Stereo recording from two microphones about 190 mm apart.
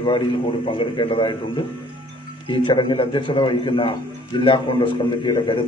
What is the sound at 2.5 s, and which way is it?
A man's voice, 25° left (ahead or behind).